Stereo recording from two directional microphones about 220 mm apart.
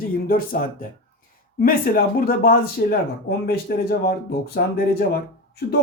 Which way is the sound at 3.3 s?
50° left (ahead or behind).